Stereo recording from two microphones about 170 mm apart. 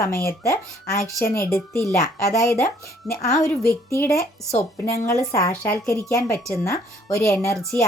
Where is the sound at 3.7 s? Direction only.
15° left (ahead or behind).